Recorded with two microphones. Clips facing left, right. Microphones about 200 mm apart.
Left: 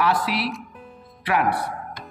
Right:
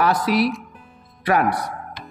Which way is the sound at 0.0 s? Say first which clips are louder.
Right 4 dB; 45° right (ahead or behind).